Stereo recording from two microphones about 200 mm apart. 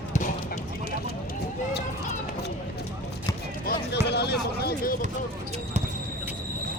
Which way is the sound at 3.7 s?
55° left (ahead or behind).